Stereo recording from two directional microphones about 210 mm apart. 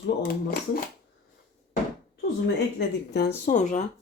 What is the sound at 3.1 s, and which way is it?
Speech, 50° left (ahead or behind).